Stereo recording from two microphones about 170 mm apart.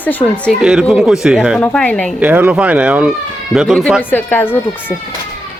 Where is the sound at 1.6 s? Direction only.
10° left (ahead or behind).